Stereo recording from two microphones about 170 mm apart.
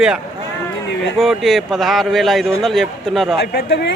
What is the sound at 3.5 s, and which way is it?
Speech, 80° left.